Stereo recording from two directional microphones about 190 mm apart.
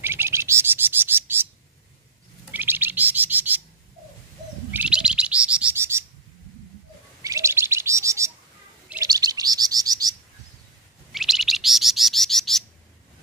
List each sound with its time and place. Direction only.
0.0 s bird: 10° right (ahead or behind)
2.5 s bird: 10° right (ahead or behind)
4.7 s bird: 5° right (ahead or behind)
7.2 s chirp: 15° right (ahead or behind)
11.1 s chirp: centre (ahead or behind)